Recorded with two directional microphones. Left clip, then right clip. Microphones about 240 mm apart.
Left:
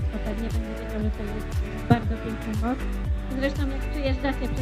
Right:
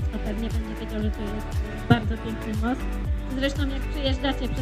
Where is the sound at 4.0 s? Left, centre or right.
Right.